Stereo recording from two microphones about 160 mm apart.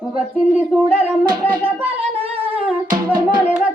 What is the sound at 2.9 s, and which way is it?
Music, 25° right (ahead or behind).